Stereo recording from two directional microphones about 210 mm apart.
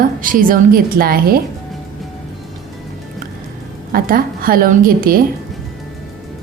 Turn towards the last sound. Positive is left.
turn(degrees=-45)  # may be behind; listen again after turning